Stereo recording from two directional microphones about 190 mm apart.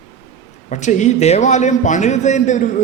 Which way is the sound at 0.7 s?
40° left (ahead or behind).